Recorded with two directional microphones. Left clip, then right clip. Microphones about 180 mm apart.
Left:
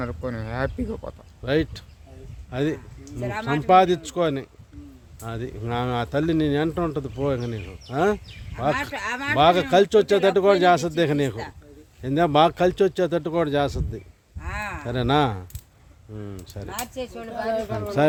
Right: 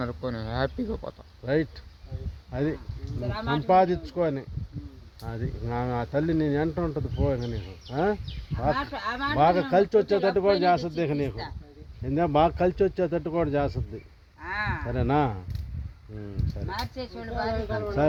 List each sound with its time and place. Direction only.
0.0 s speech: 10° left (ahead or behind)
2.5 s speech: 25° left (ahead or behind); by 11.5 s 40° left (ahead or behind)
12.0 s speech: 30° left (ahead or behind)
14.4 s a sound: 60° left (ahead or behind)
14.8 s speech: 20° left (ahead or behind)
16.6 s speech: 50° left (ahead or behind)